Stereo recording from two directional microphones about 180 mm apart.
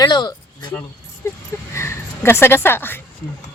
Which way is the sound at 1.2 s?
15° left (ahead or behind).